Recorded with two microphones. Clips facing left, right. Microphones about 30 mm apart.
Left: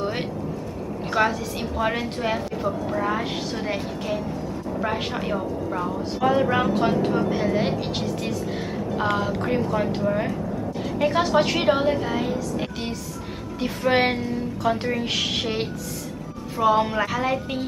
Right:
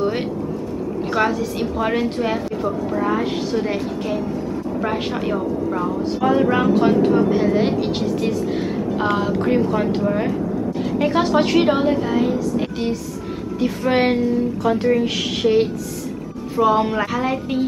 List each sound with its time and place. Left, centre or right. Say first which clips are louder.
1.1 s a woman's voice: right 2 dB; centre